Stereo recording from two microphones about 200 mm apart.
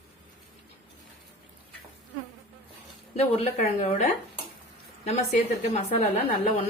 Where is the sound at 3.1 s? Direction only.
30° left (ahead or behind).